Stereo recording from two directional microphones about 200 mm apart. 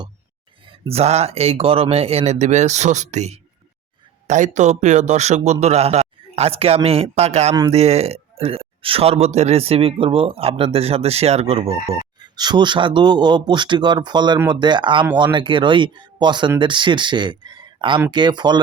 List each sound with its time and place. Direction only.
0.6 s speech: 30° right (ahead or behind)